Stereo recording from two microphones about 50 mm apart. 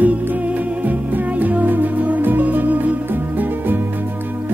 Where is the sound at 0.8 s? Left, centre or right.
Right.